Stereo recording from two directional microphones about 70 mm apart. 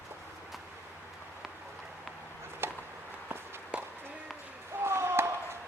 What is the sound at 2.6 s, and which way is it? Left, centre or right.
Chop, right.